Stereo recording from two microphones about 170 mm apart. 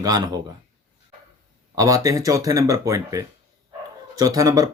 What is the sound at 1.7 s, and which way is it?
Speech, 20° right (ahead or behind).